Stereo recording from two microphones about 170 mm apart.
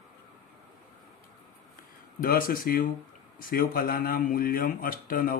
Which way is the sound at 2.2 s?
55° left (ahead or behind).